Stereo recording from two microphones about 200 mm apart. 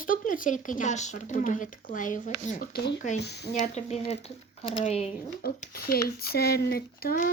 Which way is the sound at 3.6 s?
35° left (ahead or behind).